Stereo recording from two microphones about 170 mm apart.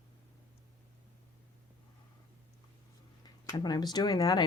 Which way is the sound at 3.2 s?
25° left (ahead or behind).